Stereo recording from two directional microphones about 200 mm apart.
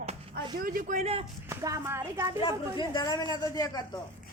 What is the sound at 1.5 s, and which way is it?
Speech, 15° right (ahead or behind).